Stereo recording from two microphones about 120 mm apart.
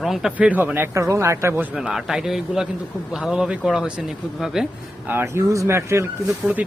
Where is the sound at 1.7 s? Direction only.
5° right (ahead or behind).